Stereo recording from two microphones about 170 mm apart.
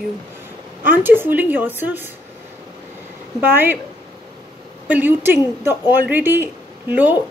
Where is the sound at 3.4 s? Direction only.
10° right (ahead or behind).